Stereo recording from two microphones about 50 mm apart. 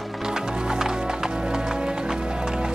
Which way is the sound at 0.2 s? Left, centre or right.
Centre.